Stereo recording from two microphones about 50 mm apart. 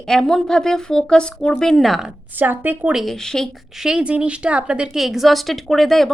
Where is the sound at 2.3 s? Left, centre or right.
Right.